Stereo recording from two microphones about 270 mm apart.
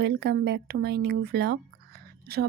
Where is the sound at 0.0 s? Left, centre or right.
Right.